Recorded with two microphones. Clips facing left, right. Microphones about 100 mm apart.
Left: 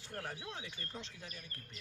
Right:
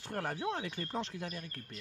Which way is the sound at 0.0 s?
60° right (ahead or behind).